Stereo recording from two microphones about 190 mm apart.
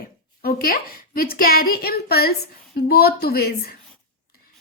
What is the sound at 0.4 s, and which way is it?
A woman's voice, 50° left (ahead or behind).